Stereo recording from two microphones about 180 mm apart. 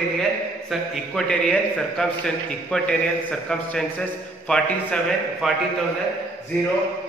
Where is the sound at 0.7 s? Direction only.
Centre (ahead or behind).